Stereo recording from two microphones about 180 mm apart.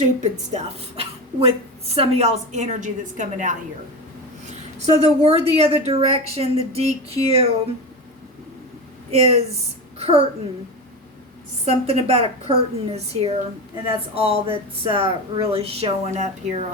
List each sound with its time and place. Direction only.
0.0 s a woman's voice: 40° right (ahead or behind)
9.0 s a child's voice: 35° right (ahead or behind)
11.6 s speech: 35° right (ahead or behind)